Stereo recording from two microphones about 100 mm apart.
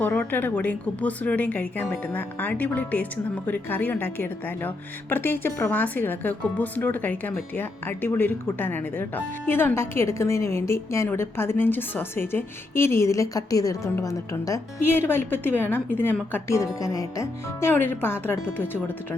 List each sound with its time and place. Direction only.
0.0 s a woman's voice: 20° left (ahead or behind)
14.8 s speech: 20° left (ahead or behind)